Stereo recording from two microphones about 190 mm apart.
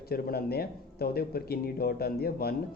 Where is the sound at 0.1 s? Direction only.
55° left (ahead or behind).